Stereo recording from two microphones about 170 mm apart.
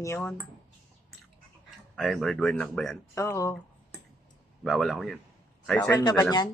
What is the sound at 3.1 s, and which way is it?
Mantra, 15° left (ahead or behind).